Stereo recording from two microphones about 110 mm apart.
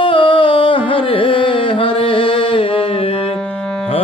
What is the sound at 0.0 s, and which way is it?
Music, 50° left (ahead or behind).